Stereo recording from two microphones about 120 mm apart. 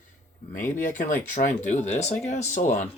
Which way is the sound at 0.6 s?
90° left.